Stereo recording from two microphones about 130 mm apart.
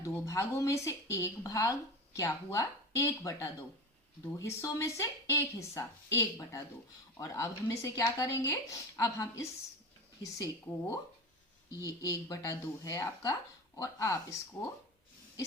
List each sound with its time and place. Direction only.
0.0 s speech: 25° left (ahead or behind)